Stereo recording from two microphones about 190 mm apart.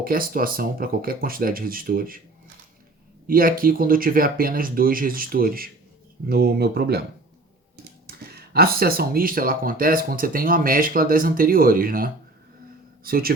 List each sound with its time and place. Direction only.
0.0 s speech: 50° right (ahead or behind)
3.2 s speech: 50° right (ahead or behind)
8.0 s speech: 55° right (ahead or behind)